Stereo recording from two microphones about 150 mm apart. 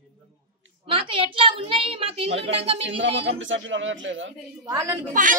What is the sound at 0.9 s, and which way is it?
A woman's voice, 35° right (ahead or behind).